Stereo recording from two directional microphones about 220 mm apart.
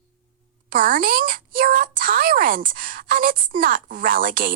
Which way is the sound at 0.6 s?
40° right (ahead or behind).